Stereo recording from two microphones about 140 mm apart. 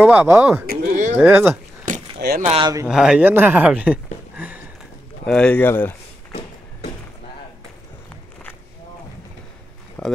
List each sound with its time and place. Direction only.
0.0 s speech: 15° right (ahead or behind)
0.7 s a sound: 65° right (ahead or behind)
1.1 s speech: 15° right (ahead or behind)
1.9 s vehicle: 65° right (ahead or behind)
2.6 s speech: 25° right (ahead or behind)
2.9 s a man's voice: 5° right (ahead or behind)
5.2 s speech: 5° left (ahead or behind)
10.0 s a sound: 5° left (ahead or behind)